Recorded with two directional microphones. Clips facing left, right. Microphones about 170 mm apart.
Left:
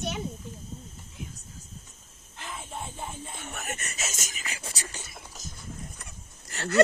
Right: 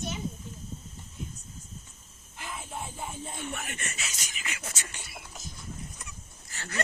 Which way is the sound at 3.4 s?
45° left (ahead or behind).